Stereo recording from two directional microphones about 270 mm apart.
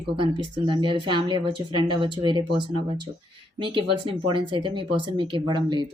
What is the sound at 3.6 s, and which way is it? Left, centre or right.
Speech, centre.